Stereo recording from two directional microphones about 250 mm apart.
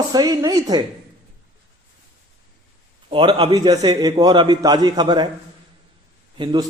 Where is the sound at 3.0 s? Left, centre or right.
Right.